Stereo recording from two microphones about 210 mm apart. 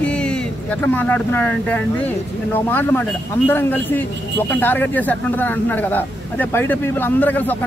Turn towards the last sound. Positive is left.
turn(degrees=10)  # may be behind; listen again after turning